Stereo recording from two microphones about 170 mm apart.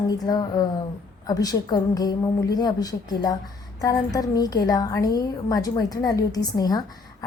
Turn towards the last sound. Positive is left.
turn(degrees=20)  # may be behind; listen again after turning